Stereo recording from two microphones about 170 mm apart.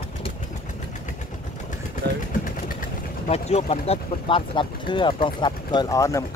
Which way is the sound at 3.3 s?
40° left (ahead or behind).